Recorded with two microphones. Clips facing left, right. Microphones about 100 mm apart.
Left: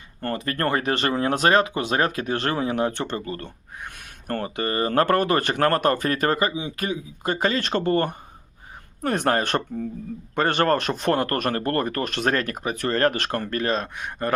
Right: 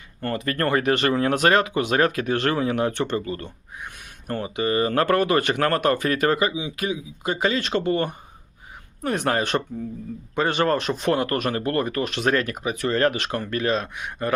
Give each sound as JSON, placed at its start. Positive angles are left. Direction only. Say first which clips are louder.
{"t": 0.2, "sound": "speech", "louder": "right 1 dB", "side_deg": 35}
{"t": 4.3, "sound": "speech", "louder": "right 2 dB", "side_deg": 50}